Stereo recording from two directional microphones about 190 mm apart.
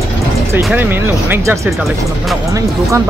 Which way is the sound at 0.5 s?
10° right (ahead or behind).